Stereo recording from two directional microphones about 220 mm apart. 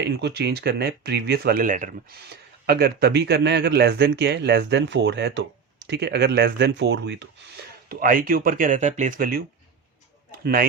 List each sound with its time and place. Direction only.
0.0 s speech: 50° right (ahead or behind)
10.4 s speech: 40° right (ahead or behind)